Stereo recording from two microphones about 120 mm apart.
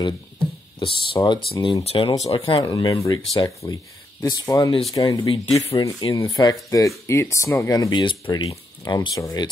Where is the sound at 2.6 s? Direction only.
35° left (ahead or behind).